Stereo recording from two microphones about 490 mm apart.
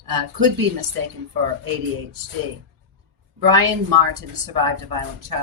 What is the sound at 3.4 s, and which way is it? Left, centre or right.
Speech, right.